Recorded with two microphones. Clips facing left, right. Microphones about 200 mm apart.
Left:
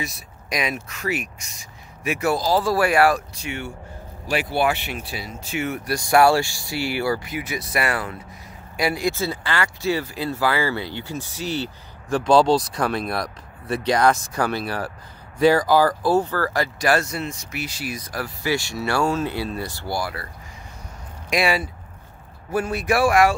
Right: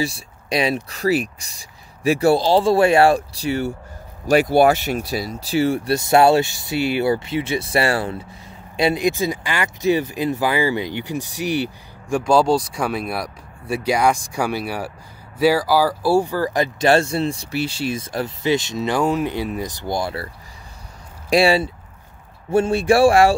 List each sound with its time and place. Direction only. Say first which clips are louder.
0.0 s speech: right 8 dB; 30° right (ahead or behind)
21.3 s speech: right 6 dB; 30° right (ahead or behind)